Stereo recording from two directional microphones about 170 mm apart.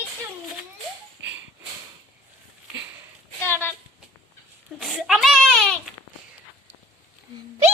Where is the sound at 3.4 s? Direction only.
15° left (ahead or behind).